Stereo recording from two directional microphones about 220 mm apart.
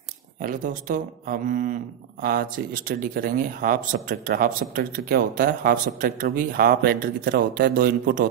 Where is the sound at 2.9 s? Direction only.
40° right (ahead or behind).